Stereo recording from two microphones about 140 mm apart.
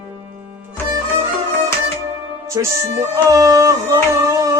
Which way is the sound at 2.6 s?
20° right (ahead or behind).